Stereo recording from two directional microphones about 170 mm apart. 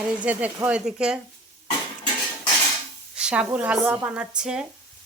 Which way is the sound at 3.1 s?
5° right (ahead or behind).